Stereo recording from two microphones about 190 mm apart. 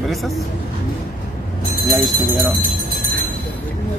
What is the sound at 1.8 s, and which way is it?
Speech, centre (ahead or behind).